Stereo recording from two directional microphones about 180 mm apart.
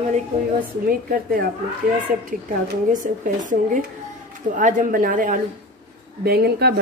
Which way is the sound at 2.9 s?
45° right (ahead or behind).